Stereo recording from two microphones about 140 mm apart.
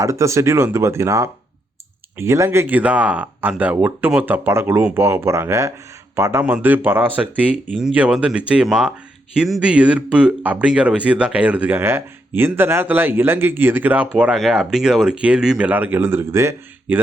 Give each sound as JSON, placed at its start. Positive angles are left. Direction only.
{"t": 0.0, "sound": "speech", "side_deg": -20}